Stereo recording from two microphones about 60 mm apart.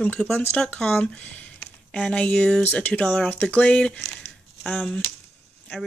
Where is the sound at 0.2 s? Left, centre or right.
Centre.